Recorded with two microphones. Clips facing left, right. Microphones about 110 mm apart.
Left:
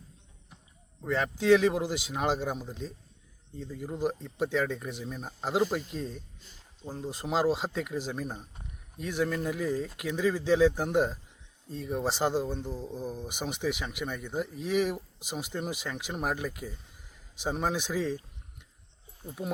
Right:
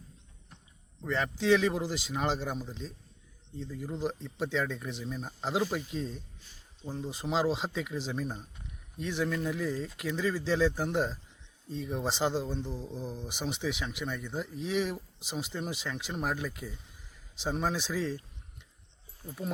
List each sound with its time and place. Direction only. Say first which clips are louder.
1.0 s speech: left 3 dB; 5° left (ahead or behind)
19.2 s speech: left 2 dB; 15° left (ahead or behind)